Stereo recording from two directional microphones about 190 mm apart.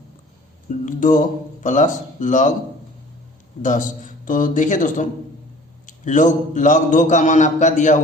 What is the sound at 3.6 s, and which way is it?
A man's voice, 40° left (ahead or behind).